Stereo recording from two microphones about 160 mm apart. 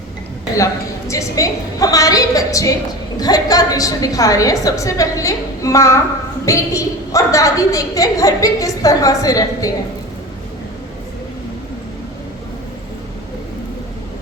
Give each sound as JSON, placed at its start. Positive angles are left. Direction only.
{"t": 0.5, "sound": "a woman's voice", "side_deg": 20}